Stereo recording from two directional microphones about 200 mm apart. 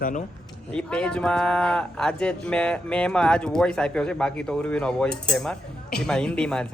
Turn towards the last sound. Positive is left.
turn(degrees=5)  # may be behind; listen again after turning